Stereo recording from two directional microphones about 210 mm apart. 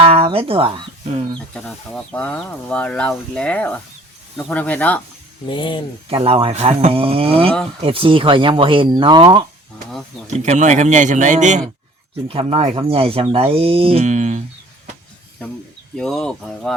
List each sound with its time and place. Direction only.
0.0 s a sound: 25° right (ahead or behind)
1.5 s speech: 5° left (ahead or behind)
5.5 s speech: 20° left (ahead or behind)
6.1 s speech: 25° right (ahead or behind)
10.2 s speech: 35° right (ahead or behind)
16.0 s speech: centre (ahead or behind)